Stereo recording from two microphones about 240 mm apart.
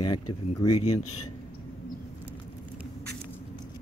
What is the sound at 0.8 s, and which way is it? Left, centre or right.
Speech, left.